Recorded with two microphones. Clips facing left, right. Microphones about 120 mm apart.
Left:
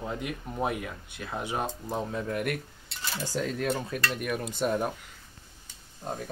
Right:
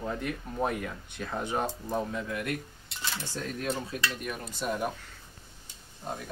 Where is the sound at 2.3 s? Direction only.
55° left (ahead or behind).